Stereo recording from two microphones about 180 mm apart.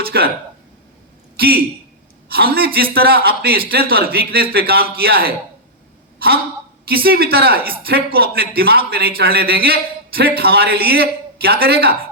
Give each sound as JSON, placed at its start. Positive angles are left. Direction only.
{"t": 0.0, "sound": "speech", "side_deg": -60}
{"t": 1.4, "sound": "a man's voice", "side_deg": -60}